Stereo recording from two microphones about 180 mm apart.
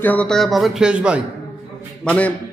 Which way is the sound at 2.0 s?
10° left (ahead or behind).